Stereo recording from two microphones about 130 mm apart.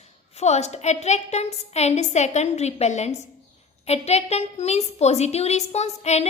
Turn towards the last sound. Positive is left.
turn(degrees=60)  # may be behind; listen again after turning